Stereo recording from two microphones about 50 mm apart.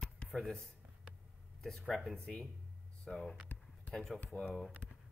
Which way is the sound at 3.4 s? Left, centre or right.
Left.